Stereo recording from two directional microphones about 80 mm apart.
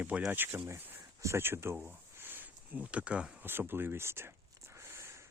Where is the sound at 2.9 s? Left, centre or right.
Centre.